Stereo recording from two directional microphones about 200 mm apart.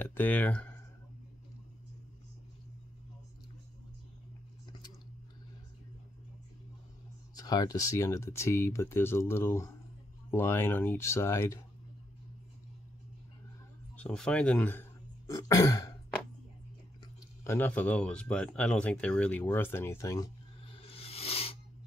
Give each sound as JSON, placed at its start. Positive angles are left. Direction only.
{"t": 0.0, "sound": "a sound", "side_deg": 10}
{"t": 7.3, "sound": "speech", "side_deg": 20}
{"t": 13.9, "sound": "speech", "side_deg": 5}
{"t": 17.4, "sound": "speech", "side_deg": 10}
{"t": 20.6, "sound": "music", "side_deg": 30}